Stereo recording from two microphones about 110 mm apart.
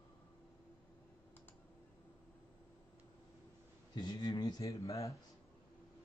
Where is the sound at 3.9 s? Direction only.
40° left (ahead or behind).